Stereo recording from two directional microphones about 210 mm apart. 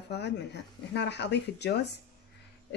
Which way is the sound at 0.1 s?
55° left (ahead or behind).